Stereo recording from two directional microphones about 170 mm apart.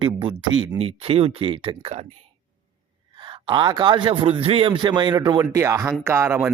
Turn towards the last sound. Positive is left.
turn(degrees=-15)  # may be behind; listen again after turning